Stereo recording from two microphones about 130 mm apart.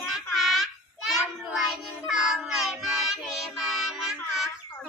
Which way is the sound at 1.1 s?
Centre (ahead or behind).